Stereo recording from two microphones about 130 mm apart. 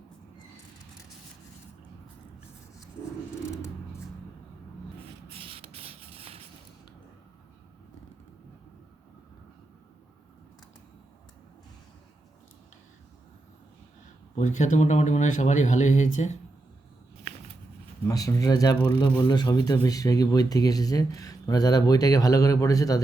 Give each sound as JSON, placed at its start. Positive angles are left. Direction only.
{"t": 5.3, "sound": "a sound", "side_deg": -45}
{"t": 14.3, "sound": "speech", "side_deg": 65}
{"t": 18.0, "sound": "speech", "side_deg": 25}